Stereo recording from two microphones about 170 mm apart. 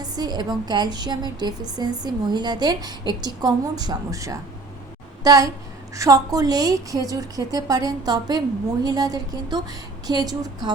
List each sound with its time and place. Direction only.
0.0 s a woman's voice: 25° right (ahead or behind)